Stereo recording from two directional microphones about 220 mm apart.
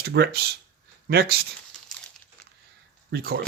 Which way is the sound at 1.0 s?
45° right (ahead or behind).